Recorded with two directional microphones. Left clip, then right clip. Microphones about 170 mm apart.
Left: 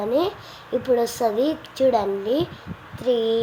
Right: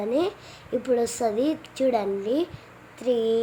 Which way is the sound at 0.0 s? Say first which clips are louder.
Left 3 dB; 15° right (ahead or behind).